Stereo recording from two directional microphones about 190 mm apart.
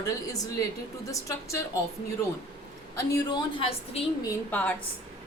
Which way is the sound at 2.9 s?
20° left (ahead or behind).